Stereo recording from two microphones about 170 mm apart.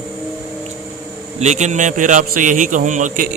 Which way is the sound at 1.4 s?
45° right (ahead or behind).